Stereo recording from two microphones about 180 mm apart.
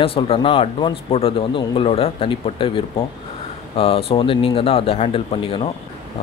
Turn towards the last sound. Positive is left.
turn(degrees=30)  # may be behind; listen again after turning